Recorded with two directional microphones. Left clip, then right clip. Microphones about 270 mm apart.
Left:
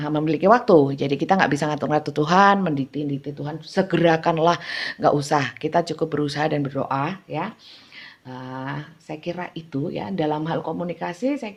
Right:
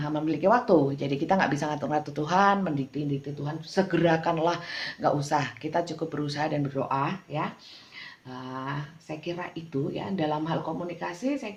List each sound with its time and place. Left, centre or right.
0.0 s speech: left